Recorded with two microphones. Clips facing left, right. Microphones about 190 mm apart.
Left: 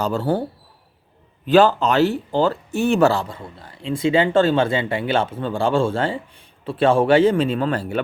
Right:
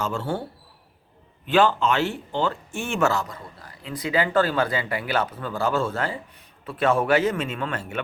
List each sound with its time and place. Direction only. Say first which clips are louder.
0.0 s speech: left 6 dB; 40° left (ahead or behind)
1.5 s speech: left 5 dB; 40° left (ahead or behind)